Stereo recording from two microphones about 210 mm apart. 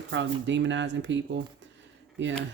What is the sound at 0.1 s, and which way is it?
Speech, 60° right (ahead or behind).